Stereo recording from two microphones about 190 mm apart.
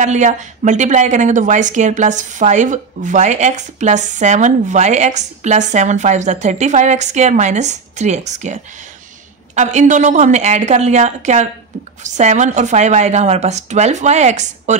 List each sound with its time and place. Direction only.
0.0 s a woman's voice: 40° right (ahead or behind)
9.6 s a woman's voice: 40° right (ahead or behind)